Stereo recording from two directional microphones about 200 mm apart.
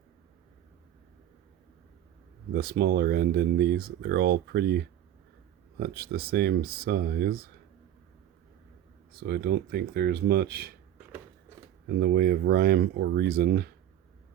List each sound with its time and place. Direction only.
2.5 s speech: 50° right (ahead or behind)
9.2 s speech: 50° right (ahead or behind)
10.9 s a sound: 10° right (ahead or behind)
11.9 s speech: 55° right (ahead or behind)